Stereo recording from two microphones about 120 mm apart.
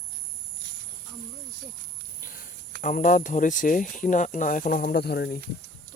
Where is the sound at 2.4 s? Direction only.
90° left.